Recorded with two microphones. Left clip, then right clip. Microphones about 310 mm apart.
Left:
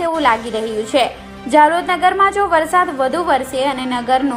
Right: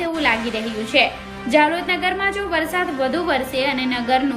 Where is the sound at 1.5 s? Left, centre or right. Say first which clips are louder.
Left 5 dB; centre.